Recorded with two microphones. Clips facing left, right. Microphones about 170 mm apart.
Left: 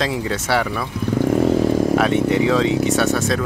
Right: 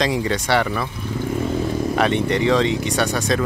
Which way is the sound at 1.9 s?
5° left (ahead or behind).